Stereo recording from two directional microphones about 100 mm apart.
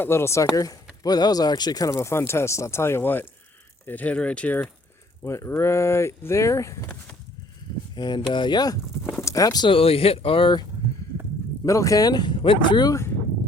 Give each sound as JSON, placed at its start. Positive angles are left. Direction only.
{"t": 0.0, "sound": "speech", "side_deg": 25}
{"t": 5.2, "sound": "speech", "side_deg": 25}
{"t": 7.9, "sound": "speech", "side_deg": 50}
{"t": 9.6, "sound": "speech", "side_deg": 70}
{"t": 11.6, "sound": "speech", "side_deg": 30}
{"t": 12.9, "sound": "speech", "side_deg": 25}